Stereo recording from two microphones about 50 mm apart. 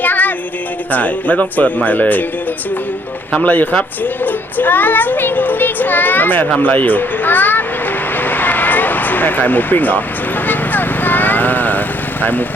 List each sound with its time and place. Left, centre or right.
0.0 s music: left
0.9 s speech: left
3.4 s a child's voice: left
8.2 s a sound: left
10.4 s vehicle: left
12.2 s speech: left